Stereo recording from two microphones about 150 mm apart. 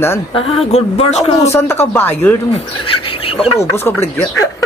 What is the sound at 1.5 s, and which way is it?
Speech, 15° left (ahead or behind).